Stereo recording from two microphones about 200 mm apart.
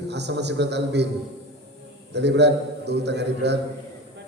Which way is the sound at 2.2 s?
60° right (ahead or behind).